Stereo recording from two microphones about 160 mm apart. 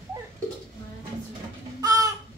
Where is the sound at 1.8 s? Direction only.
20° right (ahead or behind).